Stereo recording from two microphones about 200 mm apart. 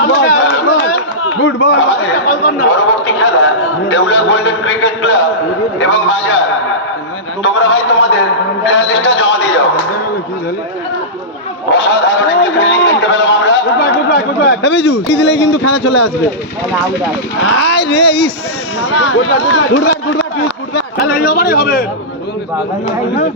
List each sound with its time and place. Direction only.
0.0 s chatter: 60° left (ahead or behind)
2.2 s a man's voice: 50° left (ahead or behind)
3.2 s a man's voice: 70° left (ahead or behind)
7.4 s a man's voice: 70° left (ahead or behind)
11.7 s a man's voice: 60° left (ahead or behind)
17.4 s a man's voice: 75° left (ahead or behind); by 18.3 s 55° left (ahead or behind)
18.8 s a man's voice: 80° left
20.7 s a man's voice: 50° left (ahead or behind)